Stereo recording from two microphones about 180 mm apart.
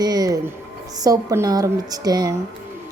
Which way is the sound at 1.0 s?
20° right (ahead or behind).